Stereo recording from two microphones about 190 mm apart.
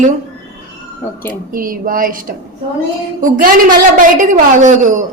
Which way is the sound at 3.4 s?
45° right (ahead or behind).